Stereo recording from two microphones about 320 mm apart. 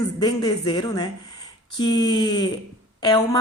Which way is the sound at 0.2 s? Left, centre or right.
Centre.